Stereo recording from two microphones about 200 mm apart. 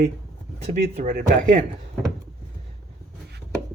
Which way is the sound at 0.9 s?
35° right (ahead or behind).